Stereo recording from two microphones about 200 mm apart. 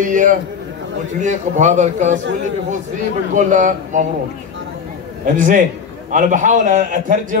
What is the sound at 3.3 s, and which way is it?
Speech, 40° right (ahead or behind).